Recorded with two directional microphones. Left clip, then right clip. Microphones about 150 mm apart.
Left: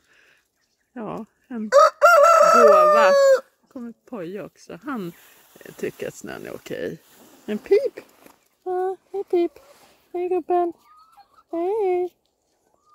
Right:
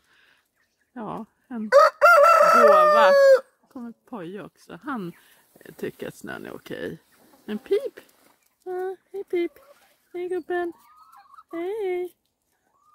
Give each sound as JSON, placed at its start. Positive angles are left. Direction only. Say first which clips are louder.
{"t": 0.9, "sound": "chicken", "louder": "left 2 dB", "side_deg": 5}
{"t": 5.6, "sound": "speech", "louder": "left 4 dB", "side_deg": 5}
{"t": 8.6, "sound": "a sound", "louder": "left 6 dB", "side_deg": 15}
{"t": 10.1, "sound": "speech", "louder": "left 6 dB", "side_deg": 15}